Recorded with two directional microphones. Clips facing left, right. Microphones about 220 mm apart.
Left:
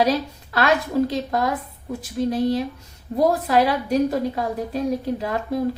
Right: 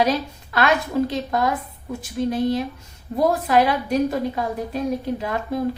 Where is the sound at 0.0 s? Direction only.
35° left (ahead or behind).